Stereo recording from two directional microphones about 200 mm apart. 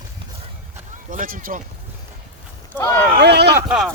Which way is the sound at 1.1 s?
45° right (ahead or behind).